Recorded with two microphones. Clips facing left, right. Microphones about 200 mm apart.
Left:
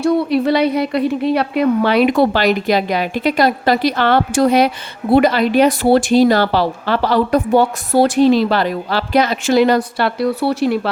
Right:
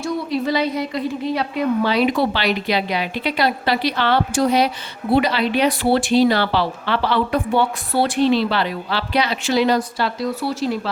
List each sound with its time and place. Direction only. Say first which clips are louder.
0.0 s speech: left 7 dB; 65° left (ahead or behind)